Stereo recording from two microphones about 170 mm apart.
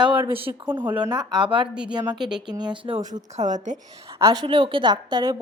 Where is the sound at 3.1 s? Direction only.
45° right (ahead or behind).